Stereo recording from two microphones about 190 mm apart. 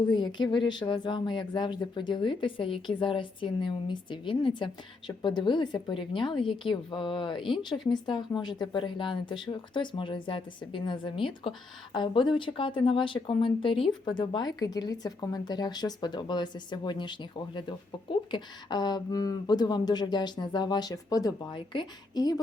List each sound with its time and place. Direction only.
0.1 s speech: 25° left (ahead or behind)